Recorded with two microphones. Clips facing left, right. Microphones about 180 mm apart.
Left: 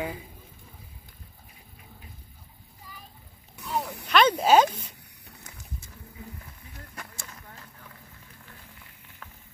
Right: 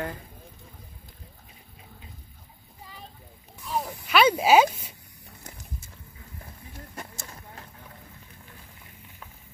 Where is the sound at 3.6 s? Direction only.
Centre (ahead or behind).